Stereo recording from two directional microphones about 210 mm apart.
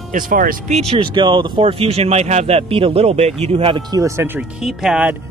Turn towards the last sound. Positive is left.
turn(degrees=-5)  # may be behind; listen again after turning